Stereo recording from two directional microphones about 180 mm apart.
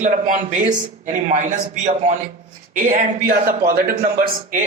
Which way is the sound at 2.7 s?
45° right (ahead or behind).